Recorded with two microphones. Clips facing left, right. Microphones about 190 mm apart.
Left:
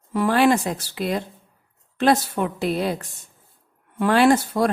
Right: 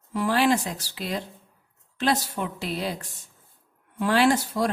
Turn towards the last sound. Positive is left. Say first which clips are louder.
# left 4 dB
turn(degrees=55)  # may be behind; listen again after turning